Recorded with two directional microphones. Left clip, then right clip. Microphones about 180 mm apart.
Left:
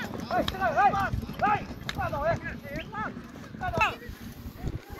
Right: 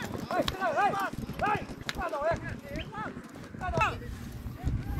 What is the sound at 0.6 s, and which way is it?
Clip-clop, 55° right (ahead or behind).